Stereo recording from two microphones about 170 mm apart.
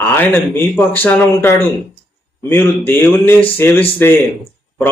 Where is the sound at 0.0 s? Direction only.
10° left (ahead or behind).